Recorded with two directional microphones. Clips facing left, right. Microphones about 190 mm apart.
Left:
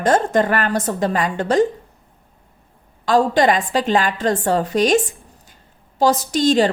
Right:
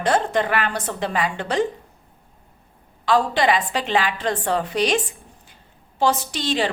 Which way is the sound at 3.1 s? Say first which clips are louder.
Left 4 dB; 45° left (ahead or behind).